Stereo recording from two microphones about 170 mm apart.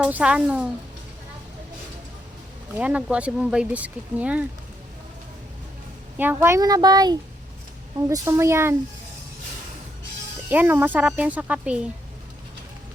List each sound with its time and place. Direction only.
0.0 s speech: 5° right (ahead or behind)
2.7 s speech: 10° right (ahead or behind)
6.1 s speech: 10° right (ahead or behind)
10.5 s speech: 10° right (ahead or behind)